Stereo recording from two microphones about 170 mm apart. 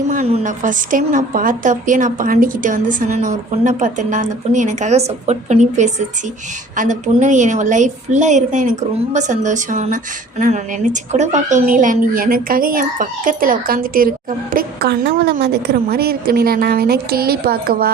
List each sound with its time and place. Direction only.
0.1 s a woman's voice: 40° right (ahead or behind); by 17.9 s 65° right (ahead or behind)